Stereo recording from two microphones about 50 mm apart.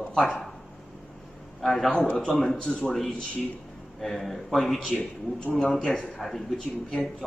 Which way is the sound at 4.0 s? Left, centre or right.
Centre.